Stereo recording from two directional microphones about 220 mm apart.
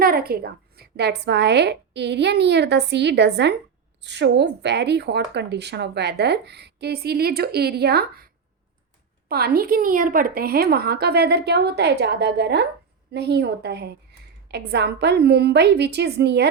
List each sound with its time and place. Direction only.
0.0 s speech: 45° right (ahead or behind)
9.3 s speech: 45° right (ahead or behind)